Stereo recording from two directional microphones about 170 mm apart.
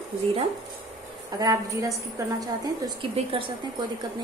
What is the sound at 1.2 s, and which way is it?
A woman's voice, 20° right (ahead or behind).